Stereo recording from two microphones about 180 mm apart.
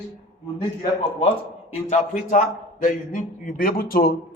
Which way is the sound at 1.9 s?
40° left (ahead or behind).